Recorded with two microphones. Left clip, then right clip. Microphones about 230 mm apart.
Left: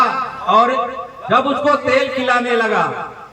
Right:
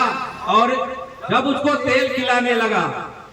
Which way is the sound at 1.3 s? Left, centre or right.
Left.